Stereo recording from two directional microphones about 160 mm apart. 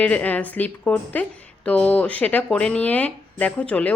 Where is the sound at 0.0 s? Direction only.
10° left (ahead or behind).